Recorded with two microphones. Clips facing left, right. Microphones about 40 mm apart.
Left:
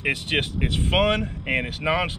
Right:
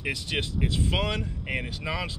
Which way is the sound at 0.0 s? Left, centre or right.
Left.